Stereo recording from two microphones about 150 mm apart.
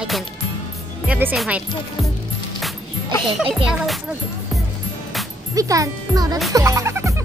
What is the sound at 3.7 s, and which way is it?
Speech, 5° right (ahead or behind).